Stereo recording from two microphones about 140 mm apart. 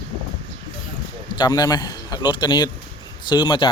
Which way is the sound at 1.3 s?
30° left (ahead or behind).